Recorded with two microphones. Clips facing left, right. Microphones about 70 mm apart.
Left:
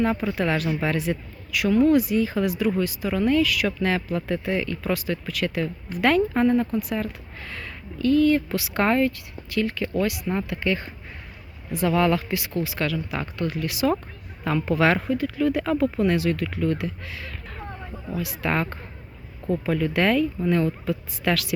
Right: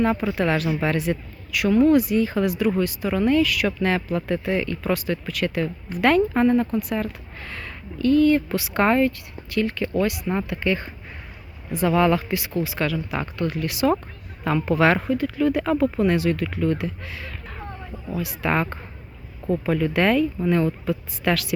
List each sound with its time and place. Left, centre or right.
0.0 s speech: right
0.3 s speech: right
1.7 s speech: right
2.0 s speech: right
13.1 s speech: right